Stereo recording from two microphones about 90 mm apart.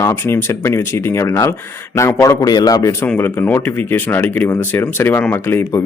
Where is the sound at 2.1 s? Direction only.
40° left (ahead or behind).